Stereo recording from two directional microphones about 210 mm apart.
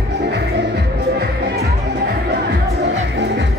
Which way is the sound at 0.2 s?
55° right (ahead or behind).